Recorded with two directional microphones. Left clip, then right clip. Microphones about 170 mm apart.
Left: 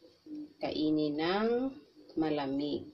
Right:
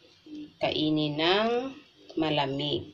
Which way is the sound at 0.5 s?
55° left (ahead or behind).